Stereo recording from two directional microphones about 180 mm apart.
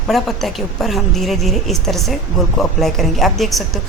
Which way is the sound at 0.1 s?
Centre (ahead or behind).